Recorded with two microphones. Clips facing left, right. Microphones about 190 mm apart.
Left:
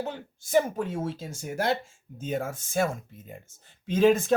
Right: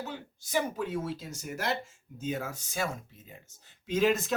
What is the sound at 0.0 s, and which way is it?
Speech, 50° left (ahead or behind).